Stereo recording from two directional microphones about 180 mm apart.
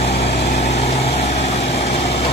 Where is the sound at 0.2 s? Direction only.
35° left (ahead or behind).